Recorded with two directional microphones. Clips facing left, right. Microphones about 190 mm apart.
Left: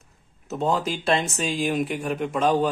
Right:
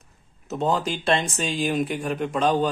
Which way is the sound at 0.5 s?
Centre (ahead or behind).